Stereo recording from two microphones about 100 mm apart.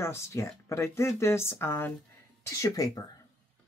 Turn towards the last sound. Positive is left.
turn(degrees=35)  # may be behind; listen again after turning